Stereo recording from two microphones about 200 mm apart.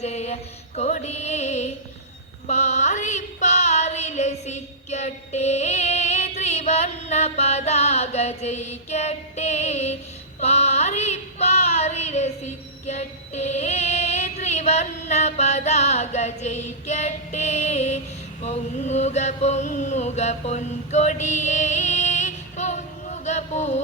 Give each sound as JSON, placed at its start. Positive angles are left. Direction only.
{"t": 0.0, "sound": "mantra", "side_deg": 35}
{"t": 0.8, "sound": "music", "side_deg": 35}
{"t": 10.4, "sound": "child singing", "side_deg": 30}
{"t": 18.4, "sound": "chant", "side_deg": 35}